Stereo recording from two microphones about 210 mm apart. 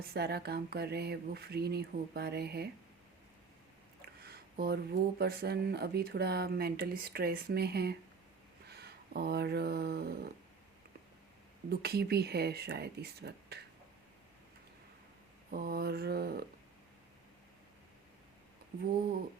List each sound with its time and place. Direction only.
0.1 s speech: 50° right (ahead or behind)
4.0 s speech: 50° right (ahead or behind)
11.7 s speech: 50° right (ahead or behind)
15.4 s speech: 45° right (ahead or behind)